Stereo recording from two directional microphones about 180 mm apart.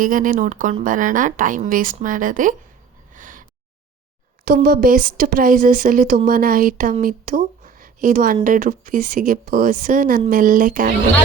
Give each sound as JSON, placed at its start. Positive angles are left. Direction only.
{"t": 0.0, "sound": "a woman's voice", "side_deg": -50}
{"t": 3.2, "sound": "gasp", "side_deg": -45}
{"t": 4.4, "sound": "a woman's voice", "side_deg": -50}